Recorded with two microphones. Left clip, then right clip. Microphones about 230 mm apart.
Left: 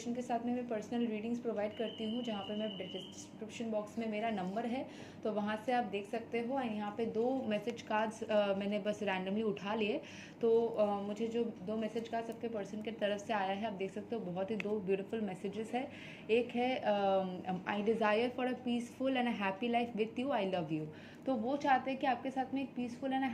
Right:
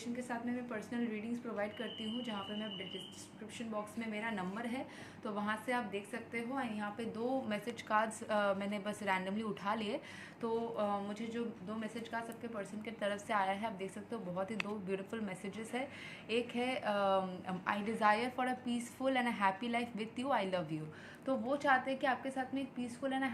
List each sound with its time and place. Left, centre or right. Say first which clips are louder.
0.0 s a woman's voice: left 4 dB; centre
4.1 s a woman's voice: left 4 dB; centre